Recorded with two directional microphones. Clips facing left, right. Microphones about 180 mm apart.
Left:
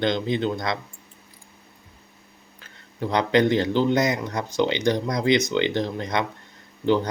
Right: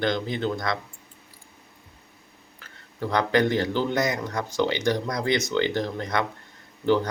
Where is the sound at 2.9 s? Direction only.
20° left (ahead or behind).